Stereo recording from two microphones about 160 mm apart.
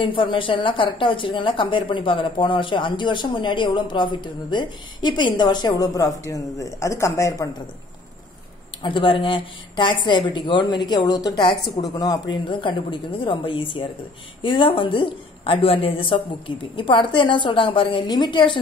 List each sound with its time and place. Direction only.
0.0 s a woman's voice: 35° left (ahead or behind)
8.8 s a woman's voice: 30° left (ahead or behind)